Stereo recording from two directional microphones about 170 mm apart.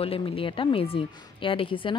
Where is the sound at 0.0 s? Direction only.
30° left (ahead or behind).